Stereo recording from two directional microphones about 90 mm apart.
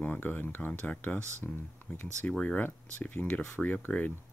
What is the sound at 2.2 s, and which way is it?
Speech, 20° left (ahead or behind).